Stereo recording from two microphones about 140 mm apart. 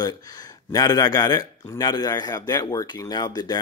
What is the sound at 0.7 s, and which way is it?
Speech, 25° left (ahead or behind).